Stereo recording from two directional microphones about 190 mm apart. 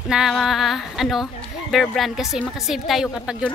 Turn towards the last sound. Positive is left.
turn(degrees=-5)  # may be behind; listen again after turning